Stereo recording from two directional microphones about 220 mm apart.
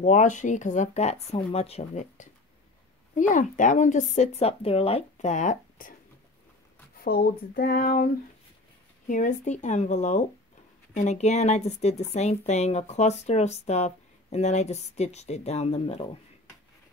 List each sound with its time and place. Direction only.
0.0 s speech: 35° left (ahead or behind)
7.0 s speech: 40° left (ahead or behind); by 16.1 s 25° left (ahead or behind)